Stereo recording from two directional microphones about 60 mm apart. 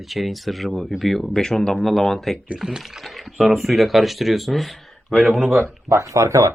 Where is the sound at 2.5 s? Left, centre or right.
Centre.